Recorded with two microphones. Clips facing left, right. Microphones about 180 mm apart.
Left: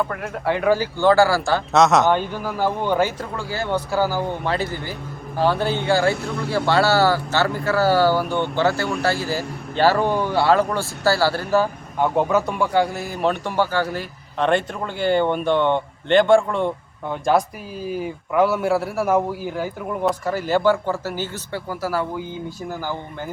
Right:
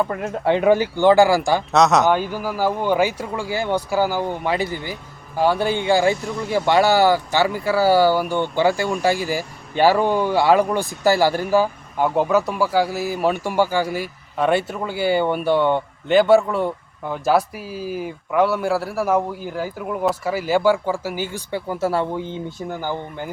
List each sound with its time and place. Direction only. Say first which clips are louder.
0.1 s speech: right 4 dB; 20° right (ahead or behind)
1.7 s speech: even; centre (ahead or behind); by 23.0 s 20° right (ahead or behind)